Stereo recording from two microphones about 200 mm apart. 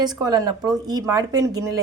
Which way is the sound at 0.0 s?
20° right (ahead or behind).